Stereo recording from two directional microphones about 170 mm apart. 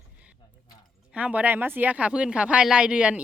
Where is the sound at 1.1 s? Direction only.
5° right (ahead or behind).